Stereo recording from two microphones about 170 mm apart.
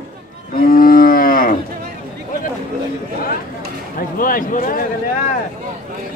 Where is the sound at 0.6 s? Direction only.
55° left (ahead or behind).